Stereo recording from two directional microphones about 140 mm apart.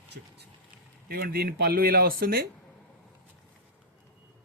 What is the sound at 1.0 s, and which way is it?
Speech, 90° right.